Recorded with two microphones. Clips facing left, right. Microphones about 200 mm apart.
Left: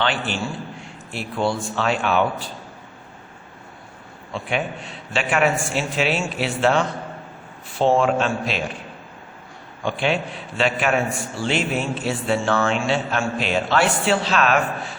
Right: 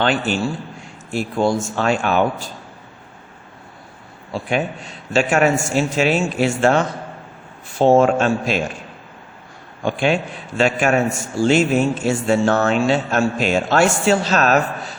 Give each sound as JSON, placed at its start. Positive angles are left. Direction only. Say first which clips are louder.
{"t": 0.0, "sound": "a man's voice", "louder": "right 5 dB", "side_deg": -45}
{"t": 4.3, "sound": "a man's voice", "louder": "right 4 dB", "side_deg": -40}
{"t": 9.8, "sound": "a man's voice", "louder": "right 4 dB", "side_deg": -45}